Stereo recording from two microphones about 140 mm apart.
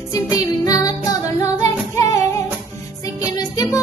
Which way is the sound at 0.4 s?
25° left (ahead or behind).